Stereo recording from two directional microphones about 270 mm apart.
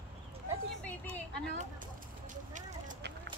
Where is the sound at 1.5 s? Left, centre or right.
Right.